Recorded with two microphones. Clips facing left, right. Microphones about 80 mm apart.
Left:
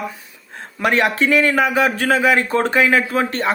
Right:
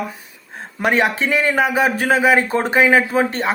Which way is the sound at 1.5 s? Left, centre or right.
Centre.